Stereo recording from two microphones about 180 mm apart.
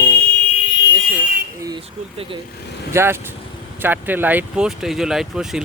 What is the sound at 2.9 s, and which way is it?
Speech, 15° right (ahead or behind).